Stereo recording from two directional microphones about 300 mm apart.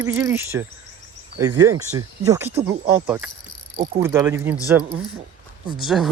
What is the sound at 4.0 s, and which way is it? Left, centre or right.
Speech, centre.